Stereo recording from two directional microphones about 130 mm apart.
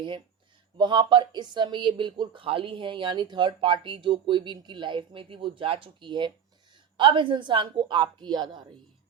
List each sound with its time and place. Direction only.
0.8 s speech: 35° right (ahead or behind)